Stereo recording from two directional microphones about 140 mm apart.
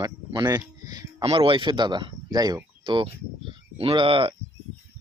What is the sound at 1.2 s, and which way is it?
Speech, 40° right (ahead or behind).